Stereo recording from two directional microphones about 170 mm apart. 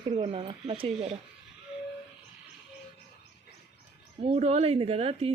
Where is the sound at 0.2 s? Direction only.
30° right (ahead or behind).